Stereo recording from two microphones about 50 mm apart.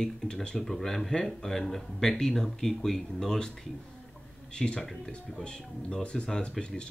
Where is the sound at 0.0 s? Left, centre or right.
Centre.